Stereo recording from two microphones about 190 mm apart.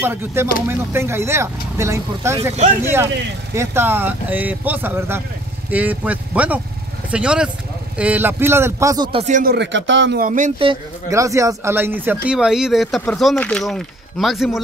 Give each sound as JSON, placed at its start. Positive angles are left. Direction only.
{"t": 0.0, "sound": "speech", "side_deg": -10}
{"t": 9.2, "sound": "speech", "side_deg": -40}
{"t": 9.5, "sound": "speech", "side_deg": -70}
{"t": 10.2, "sound": "speech", "side_deg": -45}
{"t": 11.1, "sound": "speech", "side_deg": -15}